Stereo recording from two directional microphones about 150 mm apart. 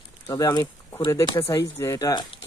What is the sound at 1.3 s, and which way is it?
Speech, 20° left (ahead or behind).